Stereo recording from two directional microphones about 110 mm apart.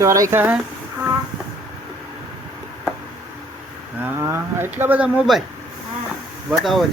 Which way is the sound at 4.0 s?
20° right (ahead or behind).